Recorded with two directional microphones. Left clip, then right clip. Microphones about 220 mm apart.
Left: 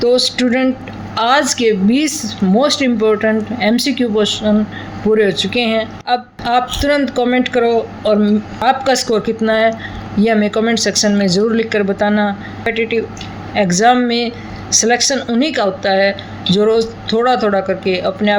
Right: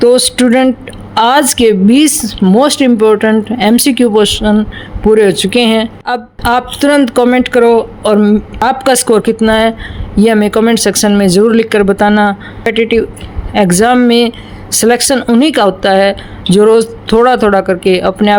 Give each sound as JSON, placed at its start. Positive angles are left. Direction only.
{"t": 0.0, "sound": "a woman's voice", "side_deg": -55}